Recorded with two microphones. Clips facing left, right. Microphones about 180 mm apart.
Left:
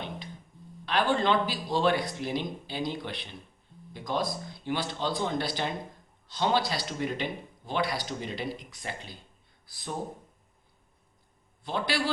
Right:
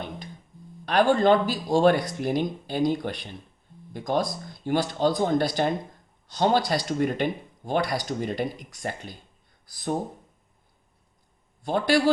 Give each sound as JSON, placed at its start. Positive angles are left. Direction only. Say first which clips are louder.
{"t": 0.9, "sound": "speech", "louder": "right 7 dB", "side_deg": -45}
{"t": 11.6, "sound": "speech", "louder": "right 9 dB", "side_deg": -45}